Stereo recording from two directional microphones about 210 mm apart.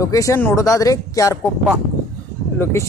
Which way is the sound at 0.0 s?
15° left (ahead or behind).